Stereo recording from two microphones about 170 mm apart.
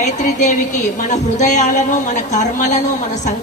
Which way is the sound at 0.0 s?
45° left (ahead or behind).